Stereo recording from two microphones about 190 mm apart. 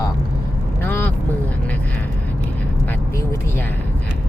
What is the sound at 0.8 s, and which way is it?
Vehicle, 10° left (ahead or behind).